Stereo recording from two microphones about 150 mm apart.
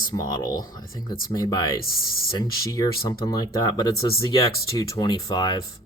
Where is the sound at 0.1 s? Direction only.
25° left (ahead or behind).